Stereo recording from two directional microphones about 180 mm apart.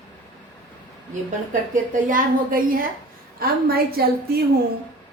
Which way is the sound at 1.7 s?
50° right (ahead or behind).